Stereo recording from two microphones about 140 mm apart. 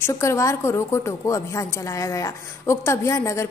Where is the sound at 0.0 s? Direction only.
20° left (ahead or behind).